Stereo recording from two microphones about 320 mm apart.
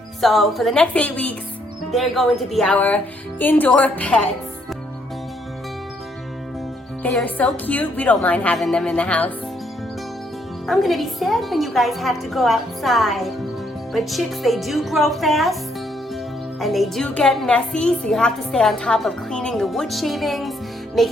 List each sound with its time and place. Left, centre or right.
0.2 s a woman's voice: centre
7.0 s a woman's voice: centre
10.7 s a woman's voice: centre
16.6 s a woman's voice: centre